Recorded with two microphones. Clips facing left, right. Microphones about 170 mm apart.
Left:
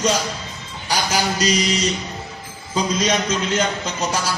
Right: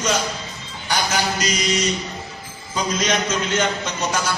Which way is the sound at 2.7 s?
35° left (ahead or behind).